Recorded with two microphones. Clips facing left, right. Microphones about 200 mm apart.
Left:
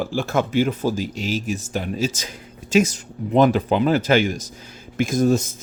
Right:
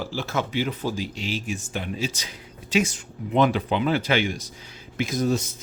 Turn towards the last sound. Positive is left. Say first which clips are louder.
# left 5 dB
turn(degrees=50)  # may be behind; listen again after turning